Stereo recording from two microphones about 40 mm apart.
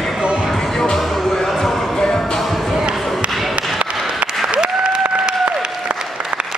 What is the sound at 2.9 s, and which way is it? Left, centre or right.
Basketball bounce, centre.